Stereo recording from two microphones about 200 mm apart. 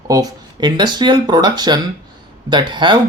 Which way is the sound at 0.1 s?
20° right (ahead or behind).